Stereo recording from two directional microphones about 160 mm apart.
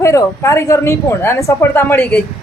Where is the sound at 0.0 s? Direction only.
20° left (ahead or behind).